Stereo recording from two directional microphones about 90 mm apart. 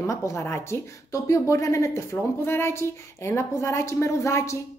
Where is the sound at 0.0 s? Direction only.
35° left (ahead or behind).